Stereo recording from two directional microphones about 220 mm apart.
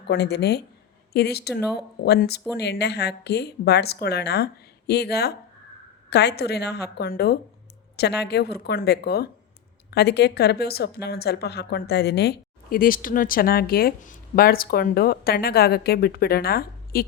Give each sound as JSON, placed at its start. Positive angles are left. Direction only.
{"t": 0.1, "sound": "speech", "side_deg": 50}